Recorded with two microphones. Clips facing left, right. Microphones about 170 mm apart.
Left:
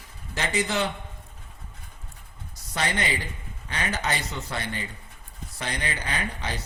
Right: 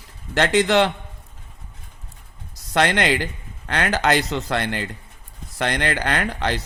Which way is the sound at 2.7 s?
85° right.